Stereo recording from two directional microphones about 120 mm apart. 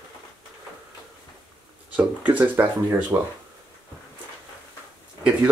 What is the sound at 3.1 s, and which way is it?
Speech, 25° right (ahead or behind).